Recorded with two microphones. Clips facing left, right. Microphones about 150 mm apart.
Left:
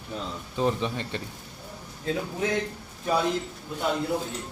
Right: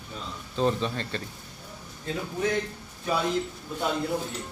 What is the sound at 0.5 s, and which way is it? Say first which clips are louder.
Speech: even; 15° left (ahead or behind).